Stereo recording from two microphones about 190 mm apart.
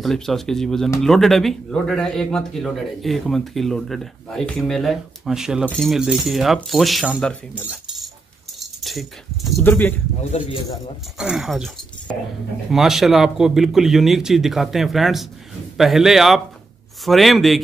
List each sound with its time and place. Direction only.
0.0 s speech: centre (ahead or behind)
8.8 s speech: centre (ahead or behind)
9.6 s speech: 10° left (ahead or behind)
10.4 s speech: 35° left (ahead or behind)
11.1 s speech: 5° right (ahead or behind)
12.7 s speech: centre (ahead or behind)